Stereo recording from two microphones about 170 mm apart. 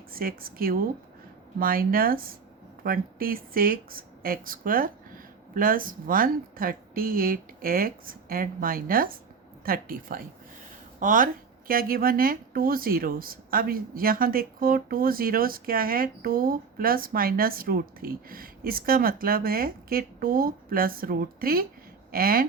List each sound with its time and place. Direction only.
0.1 s speech: 60° right (ahead or behind)